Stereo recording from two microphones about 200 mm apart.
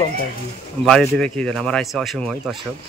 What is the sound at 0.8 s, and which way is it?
Speech, 5° left (ahead or behind).